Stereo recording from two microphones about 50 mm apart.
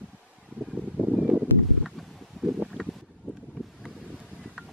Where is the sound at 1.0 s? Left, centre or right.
Right.